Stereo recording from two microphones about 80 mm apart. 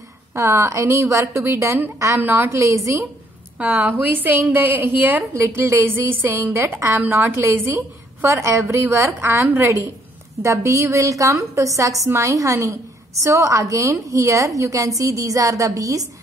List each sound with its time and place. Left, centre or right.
0.3 s a woman's voice: right
2.1 s a woman's voice: right
2.6 s a woman's voice: right
3.5 s a woman's voice: centre
5.3 s a woman's voice: right